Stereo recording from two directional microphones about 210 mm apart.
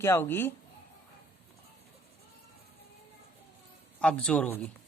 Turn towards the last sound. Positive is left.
turn(degrees=5)  # may be behind; listen again after turning